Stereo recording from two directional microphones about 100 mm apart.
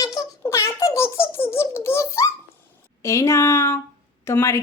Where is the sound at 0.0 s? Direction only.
35° left (ahead or behind).